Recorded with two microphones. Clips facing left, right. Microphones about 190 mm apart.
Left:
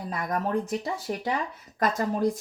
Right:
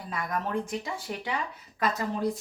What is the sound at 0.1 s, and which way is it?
Speech, 40° left (ahead or behind).